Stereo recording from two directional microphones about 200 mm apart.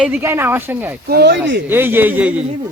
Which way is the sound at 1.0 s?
50° right (ahead or behind).